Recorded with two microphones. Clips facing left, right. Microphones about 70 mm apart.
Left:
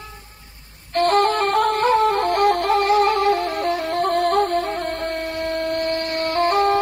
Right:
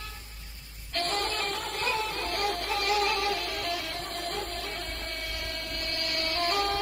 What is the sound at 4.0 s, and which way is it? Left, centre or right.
Music, left.